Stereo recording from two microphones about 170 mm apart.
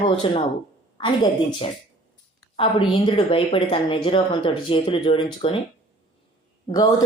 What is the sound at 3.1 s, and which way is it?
Speech, 35° left (ahead or behind).